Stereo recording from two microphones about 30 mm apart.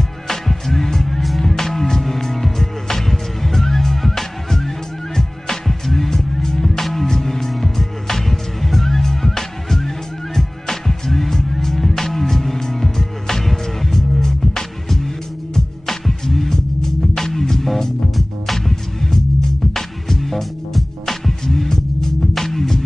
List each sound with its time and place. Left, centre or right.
0.3 s music: centre
21.6 s music: centre